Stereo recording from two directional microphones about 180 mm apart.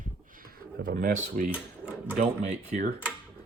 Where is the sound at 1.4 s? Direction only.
45° right (ahead or behind).